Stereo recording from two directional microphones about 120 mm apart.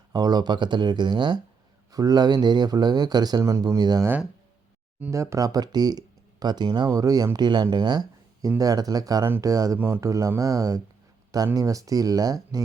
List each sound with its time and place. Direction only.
0.1 s speech: 35° right (ahead or behind)
5.1 s speech: 25° right (ahead or behind)